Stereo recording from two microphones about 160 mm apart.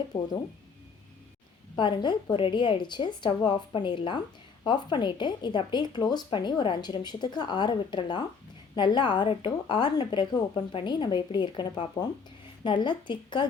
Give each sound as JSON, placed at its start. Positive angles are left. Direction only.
{"t": 0.1, "sound": "a woman's voice", "side_deg": 25}
{"t": 1.7, "sound": "a woman's voice", "side_deg": 30}